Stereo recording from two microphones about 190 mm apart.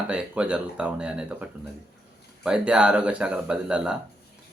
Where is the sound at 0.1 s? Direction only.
5° right (ahead or behind).